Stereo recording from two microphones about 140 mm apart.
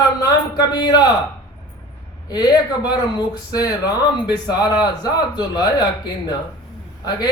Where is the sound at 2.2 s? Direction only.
30° left (ahead or behind).